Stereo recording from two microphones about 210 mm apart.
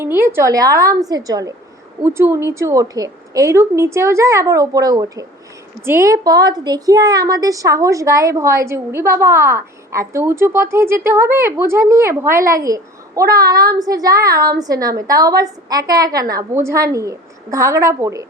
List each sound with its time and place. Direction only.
0.0 s a woman's voice: 10° right (ahead or behind)